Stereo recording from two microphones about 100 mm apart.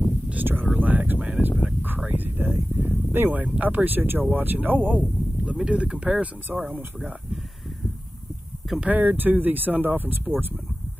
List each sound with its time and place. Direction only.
0.3 s a sound: 20° right (ahead or behind)
3.1 s speech: 20° right (ahead or behind)
8.6 s speech: 5° right (ahead or behind)
8.9 s speech: 20° right (ahead or behind)